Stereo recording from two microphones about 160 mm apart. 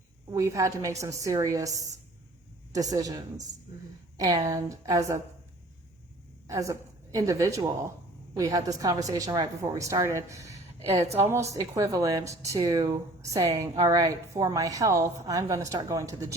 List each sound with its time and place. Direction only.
0.3 s a woman's voice: 20° right (ahead or behind)
6.5 s a woman's voice: 20° right (ahead or behind)